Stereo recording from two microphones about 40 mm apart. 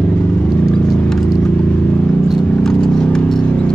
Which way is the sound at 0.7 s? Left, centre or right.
Left.